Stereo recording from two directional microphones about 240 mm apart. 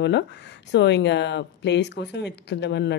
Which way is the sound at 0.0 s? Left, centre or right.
Left.